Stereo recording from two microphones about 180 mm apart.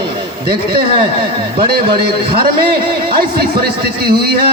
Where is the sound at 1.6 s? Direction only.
55° right (ahead or behind).